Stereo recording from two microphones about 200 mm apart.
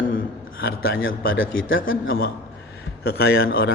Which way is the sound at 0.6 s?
85° left.